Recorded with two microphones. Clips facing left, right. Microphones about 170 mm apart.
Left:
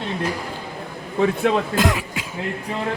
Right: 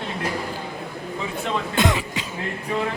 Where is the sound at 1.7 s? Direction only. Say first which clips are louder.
Left 1 dB; 5° left (ahead or behind).